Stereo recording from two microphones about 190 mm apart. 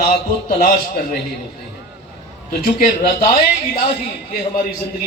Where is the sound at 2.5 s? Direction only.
45° left (ahead or behind).